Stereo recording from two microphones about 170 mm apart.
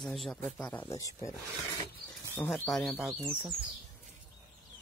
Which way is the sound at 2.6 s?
Centre (ahead or behind).